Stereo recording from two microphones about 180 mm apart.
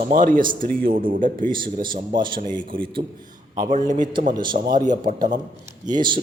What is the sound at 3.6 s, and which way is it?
Speech, 45° right (ahead or behind).